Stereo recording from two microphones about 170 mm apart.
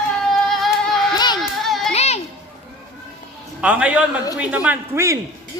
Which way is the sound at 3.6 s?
5° right (ahead or behind).